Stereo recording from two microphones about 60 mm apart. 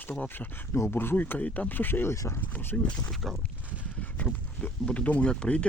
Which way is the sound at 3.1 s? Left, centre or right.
Centre.